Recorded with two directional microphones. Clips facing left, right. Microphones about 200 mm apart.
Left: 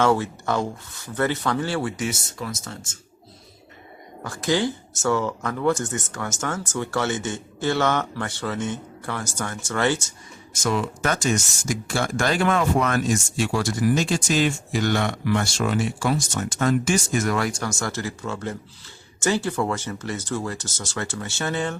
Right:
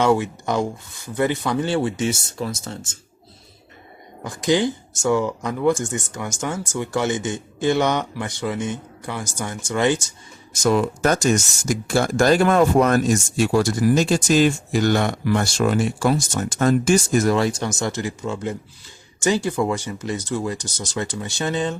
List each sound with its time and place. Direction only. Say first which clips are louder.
0.0 s speech: right 2 dB; 15° right (ahead or behind)
4.2 s speech: right 3 dB; 20° right (ahead or behind)
10.6 s speech: right 6 dB; 40° right (ahead or behind); by 21.8 s 20° right (ahead or behind)